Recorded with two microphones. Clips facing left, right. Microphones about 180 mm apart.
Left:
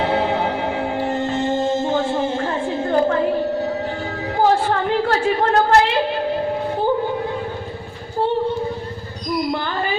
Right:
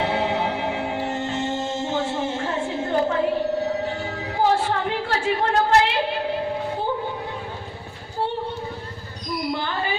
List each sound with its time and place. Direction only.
0.0 s music: 60° left (ahead or behind)
4.4 s a sound: 65° left (ahead or behind)
9.5 s music: 60° left (ahead or behind)